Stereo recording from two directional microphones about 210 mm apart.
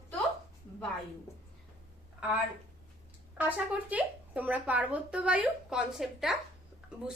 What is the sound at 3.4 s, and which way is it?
A woman's voice, 10° right (ahead or behind).